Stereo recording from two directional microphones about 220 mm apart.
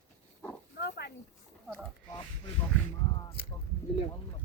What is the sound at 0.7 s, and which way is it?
Pig, 50° left (ahead or behind).